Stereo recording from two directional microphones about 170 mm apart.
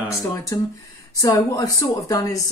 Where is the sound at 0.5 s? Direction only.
20° left (ahead or behind).